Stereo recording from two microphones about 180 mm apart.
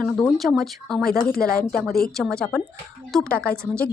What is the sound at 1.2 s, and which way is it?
Speech, 55° left (ahead or behind).